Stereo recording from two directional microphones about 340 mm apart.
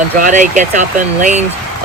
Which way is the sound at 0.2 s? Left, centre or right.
Right.